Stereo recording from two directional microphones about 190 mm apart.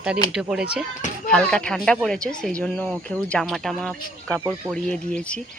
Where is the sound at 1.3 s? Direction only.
5° left (ahead or behind).